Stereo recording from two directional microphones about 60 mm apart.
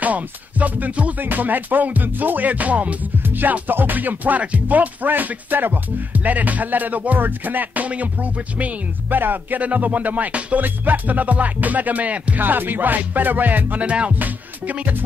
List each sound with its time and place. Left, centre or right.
0.0 s music: right